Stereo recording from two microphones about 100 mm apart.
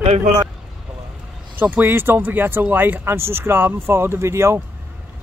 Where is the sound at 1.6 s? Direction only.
20° right (ahead or behind).